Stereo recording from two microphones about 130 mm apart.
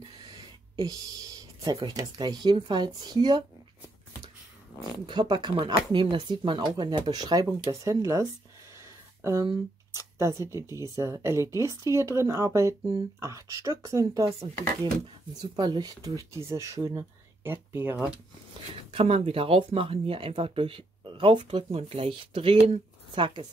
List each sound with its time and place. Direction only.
0.7 s speech: 30° right (ahead or behind)
5.0 s speech: 35° right (ahead or behind)
8.7 s a sound: 25° right (ahead or behind)
9.9 s speech: 20° right (ahead or behind)
15.5 s speech: 35° right (ahead or behind); by 18.1 s 10° right (ahead or behind)
18.9 s speech: 50° right (ahead or behind)